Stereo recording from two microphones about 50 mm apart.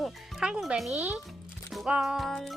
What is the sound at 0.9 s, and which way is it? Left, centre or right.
Speech, right.